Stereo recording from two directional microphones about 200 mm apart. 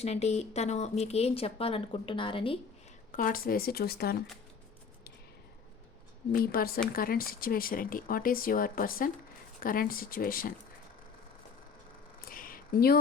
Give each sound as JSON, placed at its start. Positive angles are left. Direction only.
{"t": 0.0, "sound": "speech", "side_deg": 30}
{"t": 3.1, "sound": "speech", "side_deg": 40}
{"t": 6.3, "sound": "speech", "side_deg": 45}
{"t": 12.2, "sound": "a sound", "side_deg": 45}